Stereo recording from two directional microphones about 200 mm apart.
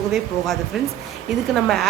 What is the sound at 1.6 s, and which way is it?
Speech, centre (ahead or behind).